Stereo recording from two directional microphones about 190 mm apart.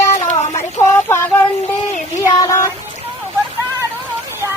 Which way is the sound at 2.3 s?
15° left (ahead or behind).